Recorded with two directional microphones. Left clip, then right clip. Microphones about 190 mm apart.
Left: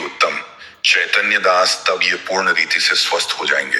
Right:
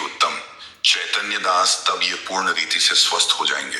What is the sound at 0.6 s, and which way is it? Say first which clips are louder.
Speech: left 4 dB; 15° left (ahead or behind).